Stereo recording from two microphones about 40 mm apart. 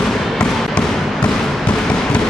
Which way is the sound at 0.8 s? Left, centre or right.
Left.